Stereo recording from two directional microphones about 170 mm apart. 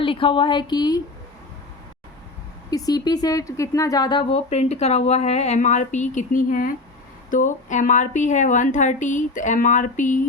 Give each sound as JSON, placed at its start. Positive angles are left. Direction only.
{"t": 0.0, "sound": "speech", "side_deg": 30}
{"t": 2.6, "sound": "a woman's voice", "side_deg": 20}